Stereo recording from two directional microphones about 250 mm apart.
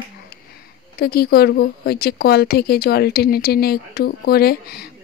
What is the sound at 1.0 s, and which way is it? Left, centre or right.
A woman's voice, left.